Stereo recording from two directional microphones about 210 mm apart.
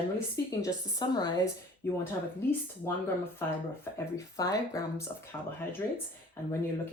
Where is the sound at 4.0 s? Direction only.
15° left (ahead or behind).